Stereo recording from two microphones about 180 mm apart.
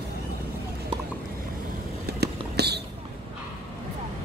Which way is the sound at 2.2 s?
65° right (ahead or behind).